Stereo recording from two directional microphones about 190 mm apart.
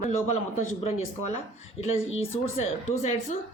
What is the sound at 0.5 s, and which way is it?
Speech, 35° left (ahead or behind).